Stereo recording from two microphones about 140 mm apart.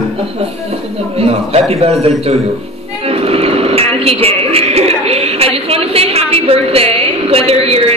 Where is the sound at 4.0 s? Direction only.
45° right (ahead or behind).